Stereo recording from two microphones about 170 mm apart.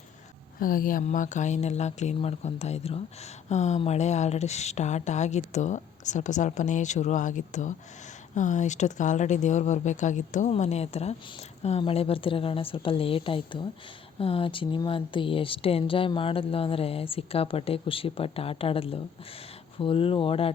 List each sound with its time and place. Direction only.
0.6 s speech: 55° left (ahead or behind); by 20.5 s 35° left (ahead or behind)